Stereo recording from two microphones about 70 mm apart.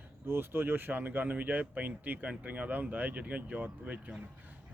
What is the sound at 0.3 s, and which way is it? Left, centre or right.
A man's voice, right.